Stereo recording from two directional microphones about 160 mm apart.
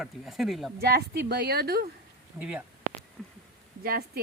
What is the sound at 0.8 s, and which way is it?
Speech, 75° right (ahead or behind).